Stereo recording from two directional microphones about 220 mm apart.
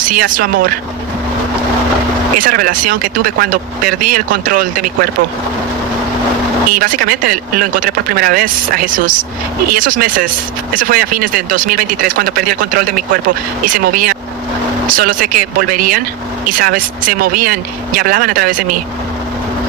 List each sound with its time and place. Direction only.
0.0 s speech: 40° right (ahead or behind)
2.4 s speech: 40° right (ahead or behind)
6.7 s speech: 40° right (ahead or behind)
14.8 s speech: 40° right (ahead or behind)